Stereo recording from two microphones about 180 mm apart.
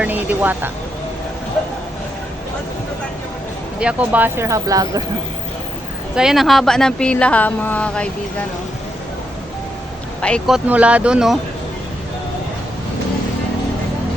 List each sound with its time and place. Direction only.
0.0 s speech: 10° right (ahead or behind)
3.8 s speech: 5° right (ahead or behind)
6.1 s speech: centre (ahead or behind)
10.2 s speech: 5° left (ahead or behind)